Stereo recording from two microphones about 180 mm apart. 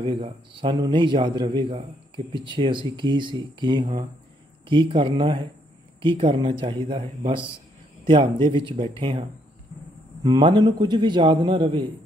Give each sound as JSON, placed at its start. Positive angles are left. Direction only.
{"t": 0.0, "sound": "a man's voice", "side_deg": -25}
{"t": 10.2, "sound": "a man's voice", "side_deg": -25}